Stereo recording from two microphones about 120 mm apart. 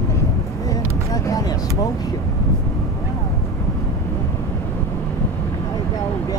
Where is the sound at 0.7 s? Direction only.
25° left (ahead or behind).